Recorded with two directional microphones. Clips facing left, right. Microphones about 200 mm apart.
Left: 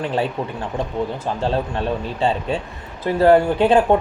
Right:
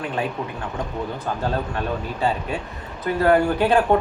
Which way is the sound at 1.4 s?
25° left (ahead or behind).